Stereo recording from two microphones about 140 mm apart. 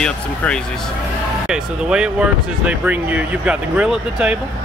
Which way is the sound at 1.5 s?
5° right (ahead or behind).